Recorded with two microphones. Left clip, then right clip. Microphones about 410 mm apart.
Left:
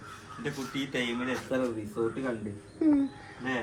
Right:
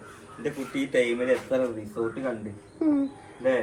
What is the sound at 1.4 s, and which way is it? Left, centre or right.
Speech, centre.